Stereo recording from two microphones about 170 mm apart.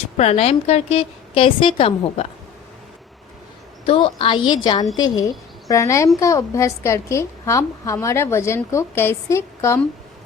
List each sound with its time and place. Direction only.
0.2 s a woman's voice: 35° left (ahead or behind)
3.8 s a woman's voice: 30° left (ahead or behind); by 9.8 s 15° left (ahead or behind)